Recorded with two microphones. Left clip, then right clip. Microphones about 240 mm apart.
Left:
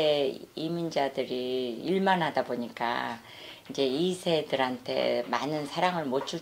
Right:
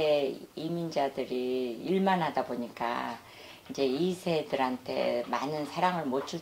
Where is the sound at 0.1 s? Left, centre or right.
Left.